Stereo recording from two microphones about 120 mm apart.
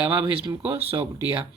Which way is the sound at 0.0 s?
20° right (ahead or behind).